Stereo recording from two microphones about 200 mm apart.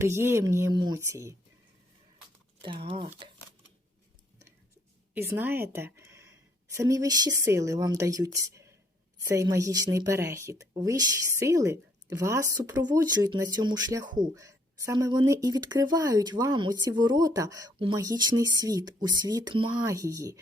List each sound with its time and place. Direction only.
0.0 s speech: 10° right (ahead or behind)
2.6 s speech: 25° right (ahead or behind)
5.1 s a woman's voice: 10° right (ahead or behind)